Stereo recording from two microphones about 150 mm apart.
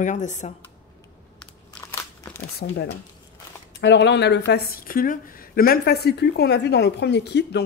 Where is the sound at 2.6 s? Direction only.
85° left.